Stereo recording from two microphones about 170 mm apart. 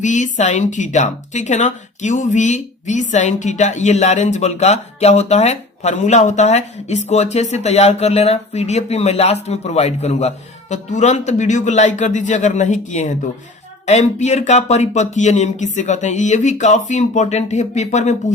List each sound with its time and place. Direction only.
0.0 s speech: 45° left (ahead or behind)